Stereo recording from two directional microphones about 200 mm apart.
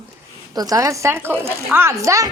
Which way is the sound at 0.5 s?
15° right (ahead or behind).